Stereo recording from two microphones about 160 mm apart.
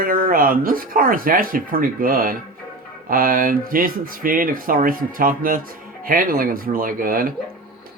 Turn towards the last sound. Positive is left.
turn(degrees=-60)  # may be behind; listen again after turning